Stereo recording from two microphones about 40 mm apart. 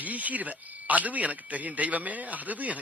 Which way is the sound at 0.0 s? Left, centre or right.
Right.